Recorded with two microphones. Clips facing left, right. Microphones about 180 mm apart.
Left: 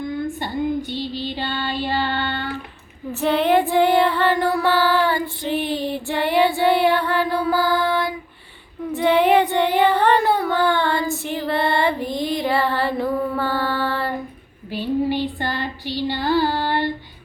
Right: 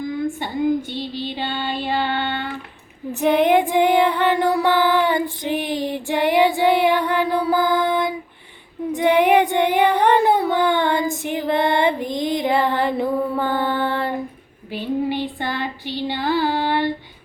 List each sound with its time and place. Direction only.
0.9 s music: 55° right (ahead or behind)
1.4 s music: 20° right (ahead or behind)
1.8 s child singing: 20° right (ahead or behind)
3.1 s female singing: 15° right (ahead or behind)
8.9 s child singing: 15° right (ahead or behind)
16.0 s female singing: 15° right (ahead or behind)